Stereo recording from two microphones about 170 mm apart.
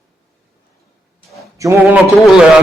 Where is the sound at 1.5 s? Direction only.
20° right (ahead or behind).